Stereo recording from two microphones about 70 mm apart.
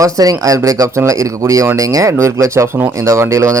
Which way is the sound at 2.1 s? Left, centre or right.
Right.